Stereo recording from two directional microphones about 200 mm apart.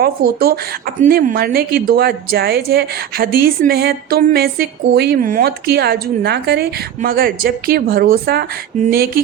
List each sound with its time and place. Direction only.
0.0 s a woman's voice: 50° right (ahead or behind)